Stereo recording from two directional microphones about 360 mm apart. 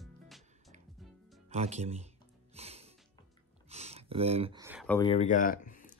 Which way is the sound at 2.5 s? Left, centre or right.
Centre.